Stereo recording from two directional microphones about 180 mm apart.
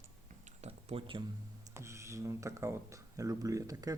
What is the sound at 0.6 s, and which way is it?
Speech, 35° right (ahead or behind).